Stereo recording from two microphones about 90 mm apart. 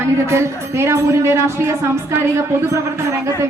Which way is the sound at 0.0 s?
30° right (ahead or behind).